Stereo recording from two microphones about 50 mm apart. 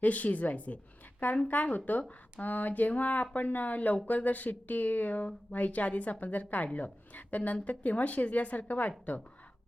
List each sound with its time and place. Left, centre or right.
0.0 s speech: left